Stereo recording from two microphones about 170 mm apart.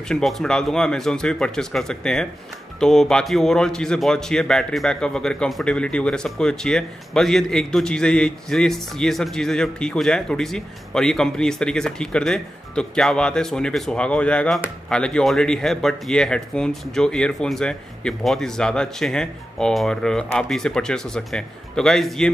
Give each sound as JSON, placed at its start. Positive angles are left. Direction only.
{"t": 0.1, "sound": "a man's voice", "side_deg": 0}